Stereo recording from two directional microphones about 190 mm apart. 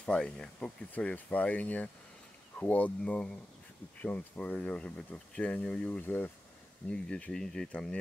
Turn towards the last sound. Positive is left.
turn(degrees=5)  # may be behind; listen again after turning